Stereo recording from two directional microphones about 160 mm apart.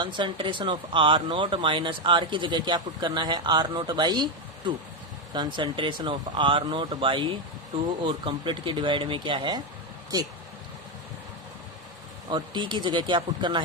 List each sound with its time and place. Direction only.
0.0 s speech: 30° right (ahead or behind)
12.3 s speech: 30° right (ahead or behind)